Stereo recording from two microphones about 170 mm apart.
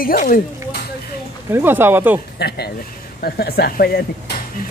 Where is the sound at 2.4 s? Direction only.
70° left (ahead or behind).